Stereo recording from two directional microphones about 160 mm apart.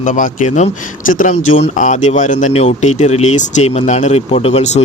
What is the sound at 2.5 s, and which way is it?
Speech, 40° left (ahead or behind).